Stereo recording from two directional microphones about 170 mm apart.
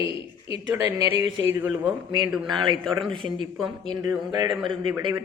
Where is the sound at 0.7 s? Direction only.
25° right (ahead or behind).